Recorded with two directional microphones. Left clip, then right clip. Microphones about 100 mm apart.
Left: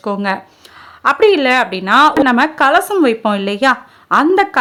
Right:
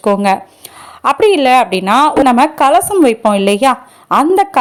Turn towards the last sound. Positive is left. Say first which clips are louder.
# right 1 dB
turn(degrees=-30)  # may be behind; listen again after turning